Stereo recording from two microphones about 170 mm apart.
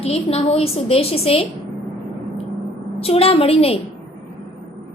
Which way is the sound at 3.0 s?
35° left (ahead or behind).